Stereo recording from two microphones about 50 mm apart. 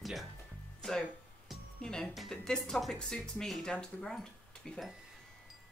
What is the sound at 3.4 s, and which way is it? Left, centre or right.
Speech, centre.